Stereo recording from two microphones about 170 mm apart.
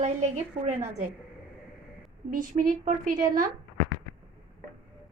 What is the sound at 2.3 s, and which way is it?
A woman's voice, 55° right (ahead or behind).